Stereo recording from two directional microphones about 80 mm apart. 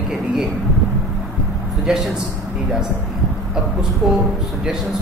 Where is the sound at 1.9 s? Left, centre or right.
Centre.